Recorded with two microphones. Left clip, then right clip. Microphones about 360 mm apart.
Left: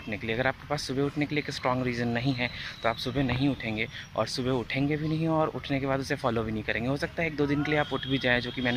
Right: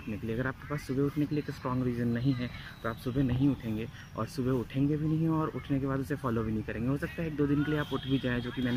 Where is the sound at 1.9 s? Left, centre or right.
Left.